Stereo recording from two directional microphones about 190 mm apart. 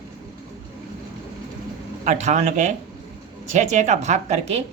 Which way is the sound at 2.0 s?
35° right (ahead or behind).